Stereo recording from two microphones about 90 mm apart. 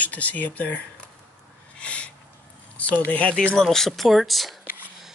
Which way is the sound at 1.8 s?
15° left (ahead or behind).